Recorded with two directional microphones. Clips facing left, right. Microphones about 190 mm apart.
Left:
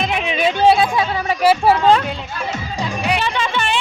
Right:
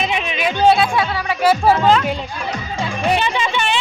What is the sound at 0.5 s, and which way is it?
Music, 10° left (ahead or behind).